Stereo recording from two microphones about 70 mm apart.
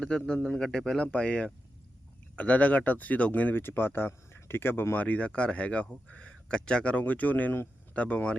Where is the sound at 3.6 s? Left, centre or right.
Left.